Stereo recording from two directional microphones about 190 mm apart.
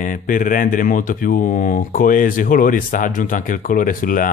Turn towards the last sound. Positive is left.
turn(degrees=45)  # may be behind; listen again after turning